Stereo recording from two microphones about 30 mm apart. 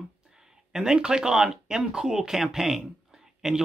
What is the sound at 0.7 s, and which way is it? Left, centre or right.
Speech, right.